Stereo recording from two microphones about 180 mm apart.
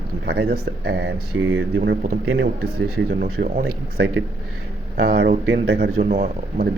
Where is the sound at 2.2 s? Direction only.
90° right.